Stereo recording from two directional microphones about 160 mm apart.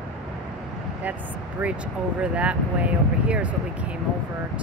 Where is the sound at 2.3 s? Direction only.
5° right (ahead or behind).